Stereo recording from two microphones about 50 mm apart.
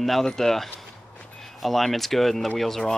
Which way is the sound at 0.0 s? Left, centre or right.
Centre.